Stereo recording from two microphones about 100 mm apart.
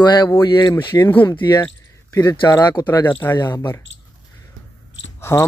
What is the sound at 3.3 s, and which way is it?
Speech, 45° left (ahead or behind).